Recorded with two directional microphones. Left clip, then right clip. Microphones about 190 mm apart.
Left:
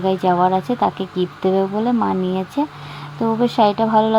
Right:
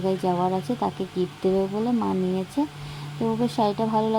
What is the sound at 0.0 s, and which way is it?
Speech, 15° left (ahead or behind).